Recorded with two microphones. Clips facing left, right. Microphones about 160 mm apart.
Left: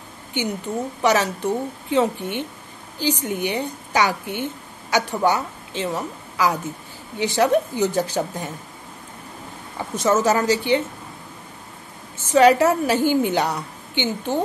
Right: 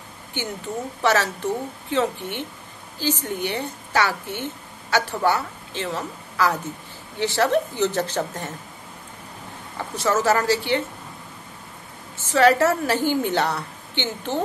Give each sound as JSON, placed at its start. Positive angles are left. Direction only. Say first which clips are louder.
{"t": 0.3, "sound": "a woman's voice", "louder": "left 4 dB", "side_deg": 15}
{"t": 9.8, "sound": "a woman's voice", "louder": "left 3 dB", "side_deg": 20}
{"t": 12.3, "sound": "a woman's voice", "louder": "left 3 dB", "side_deg": 15}